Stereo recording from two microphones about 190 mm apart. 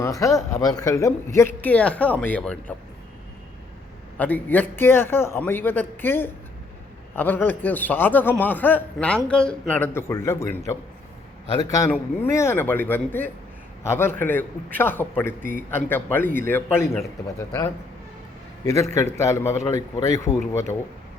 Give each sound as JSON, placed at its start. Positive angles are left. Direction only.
{"t": 0.0, "sound": "a man's voice", "side_deg": 15}
{"t": 4.2, "sound": "a man's voice", "side_deg": 10}
{"t": 11.7, "sound": "a man's voice", "side_deg": 15}
{"t": 18.6, "sound": "a man's voice", "side_deg": 15}